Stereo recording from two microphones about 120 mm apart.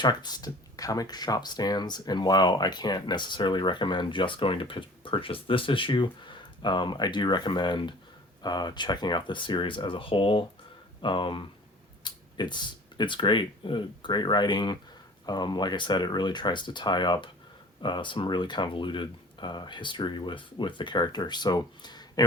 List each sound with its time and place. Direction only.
0.0 s speech: 35° left (ahead or behind)